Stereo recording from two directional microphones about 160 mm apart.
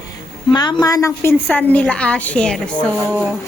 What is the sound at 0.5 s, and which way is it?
A woman's voice, 25° left (ahead or behind).